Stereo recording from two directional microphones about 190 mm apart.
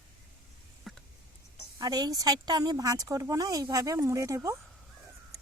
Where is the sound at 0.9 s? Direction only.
Centre (ahead or behind).